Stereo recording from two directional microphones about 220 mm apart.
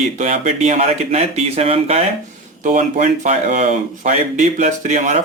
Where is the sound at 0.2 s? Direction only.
35° right (ahead or behind).